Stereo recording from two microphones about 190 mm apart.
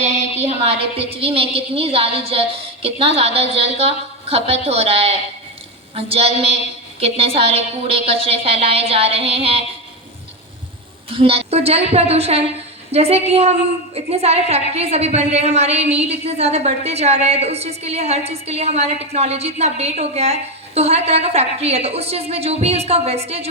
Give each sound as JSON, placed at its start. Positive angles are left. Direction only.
{"t": 0.0, "sound": "a woman's voice", "side_deg": -35}
{"t": 11.1, "sound": "a woman's voice", "side_deg": -30}